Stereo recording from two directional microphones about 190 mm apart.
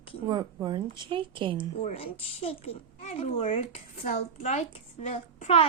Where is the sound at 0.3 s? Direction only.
20° right (ahead or behind).